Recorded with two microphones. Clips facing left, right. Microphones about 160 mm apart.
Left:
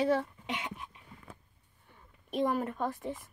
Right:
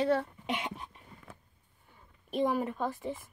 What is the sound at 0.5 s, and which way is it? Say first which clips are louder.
Speech: right 2 dB; 35° right (ahead or behind).